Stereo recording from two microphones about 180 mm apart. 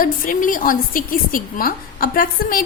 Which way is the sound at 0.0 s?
50° left (ahead or behind).